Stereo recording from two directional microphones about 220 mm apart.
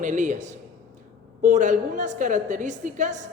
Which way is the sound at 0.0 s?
35° right (ahead or behind).